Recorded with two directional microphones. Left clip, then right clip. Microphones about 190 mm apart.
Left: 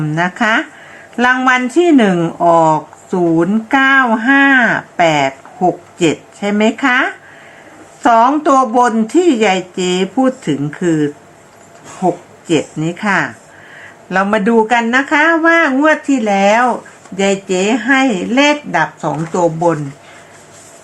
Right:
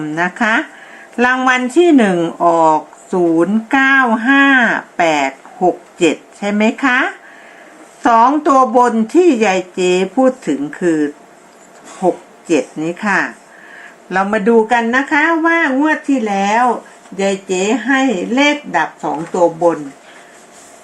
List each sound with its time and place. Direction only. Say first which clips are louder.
0.0 s speech: left 1 dB; 5° left (ahead or behind)